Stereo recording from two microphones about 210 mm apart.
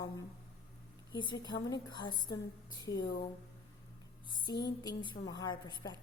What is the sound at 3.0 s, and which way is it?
Speech, 45° left (ahead or behind).